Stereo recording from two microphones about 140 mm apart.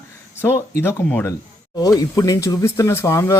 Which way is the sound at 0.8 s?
15° left (ahead or behind).